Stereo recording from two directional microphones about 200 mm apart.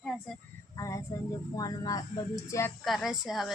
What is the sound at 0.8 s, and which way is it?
Speech, 15° left (ahead or behind).